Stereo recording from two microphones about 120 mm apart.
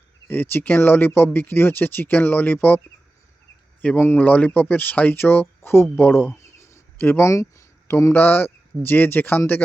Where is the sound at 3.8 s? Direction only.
15° left (ahead or behind).